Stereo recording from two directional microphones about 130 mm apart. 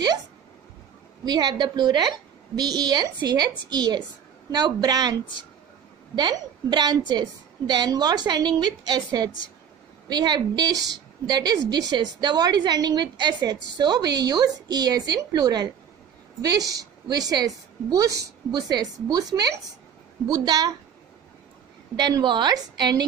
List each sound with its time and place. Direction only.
1.2 s a woman's voice: 35° right (ahead or behind)
6.1 s a woman's voice: 35° right (ahead or behind)
21.9 s a woman's voice: 35° right (ahead or behind)